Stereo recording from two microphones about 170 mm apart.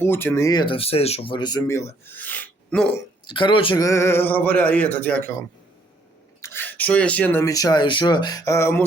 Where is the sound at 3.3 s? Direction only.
30° left (ahead or behind); by 5.3 s 10° left (ahead or behind).